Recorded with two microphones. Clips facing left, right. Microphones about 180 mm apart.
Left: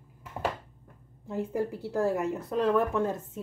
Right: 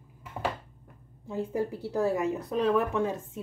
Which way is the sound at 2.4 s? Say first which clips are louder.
Even; 15° right (ahead or behind).